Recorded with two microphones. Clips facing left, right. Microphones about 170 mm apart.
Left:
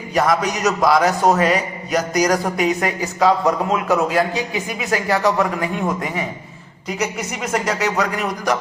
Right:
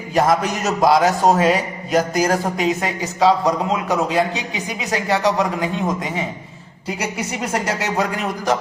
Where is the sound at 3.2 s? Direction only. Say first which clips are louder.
Even; 20° right (ahead or behind).